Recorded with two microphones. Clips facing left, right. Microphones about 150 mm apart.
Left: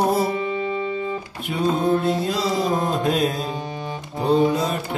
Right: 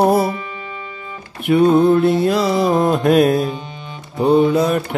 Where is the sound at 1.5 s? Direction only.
65° right (ahead or behind).